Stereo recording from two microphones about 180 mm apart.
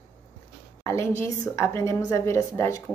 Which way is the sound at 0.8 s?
15° left (ahead or behind).